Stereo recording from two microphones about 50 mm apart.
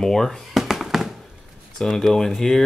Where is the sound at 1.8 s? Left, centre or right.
Centre.